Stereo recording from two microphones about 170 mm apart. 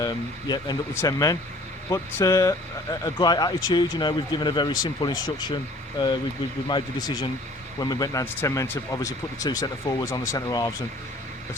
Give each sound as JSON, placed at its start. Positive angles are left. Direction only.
{"t": 0.0, "sound": "speech", "side_deg": 25}
{"t": 6.7, "sound": "speech", "side_deg": 25}